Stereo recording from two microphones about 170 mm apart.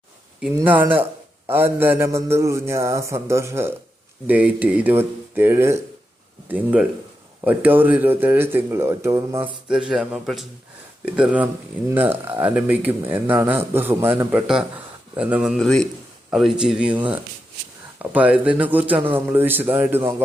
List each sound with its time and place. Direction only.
0.8 s a man's voice: 10° right (ahead or behind)
9.6 s a man's voice: 5° right (ahead or behind)